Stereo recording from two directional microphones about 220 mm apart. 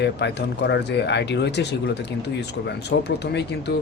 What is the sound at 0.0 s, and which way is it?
Speech, 50° left (ahead or behind).